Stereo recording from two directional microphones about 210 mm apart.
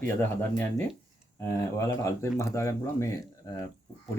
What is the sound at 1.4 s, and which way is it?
Speech, 15° left (ahead or behind).